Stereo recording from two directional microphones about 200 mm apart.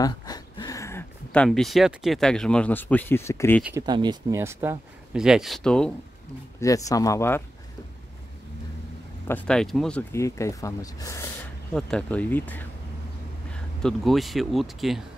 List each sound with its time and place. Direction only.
0.0 s speech: 20° left (ahead or behind)
3.6 s speech: 15° right (ahead or behind); by 5.9 s 5° left (ahead or behind)
6.6 s speech: 15° left (ahead or behind)
9.3 s speech: 5° left (ahead or behind)
11.7 s speech: 5° left (ahead or behind)